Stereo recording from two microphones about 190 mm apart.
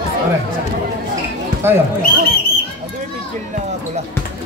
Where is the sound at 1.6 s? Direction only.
10° right (ahead or behind).